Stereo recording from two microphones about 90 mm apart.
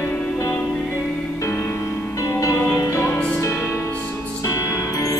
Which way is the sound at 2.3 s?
35° left (ahead or behind).